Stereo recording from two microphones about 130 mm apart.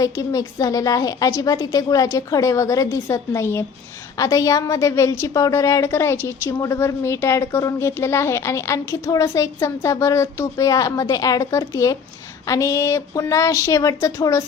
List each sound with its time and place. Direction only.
0.0 s a woman's voice: 25° left (ahead or behind)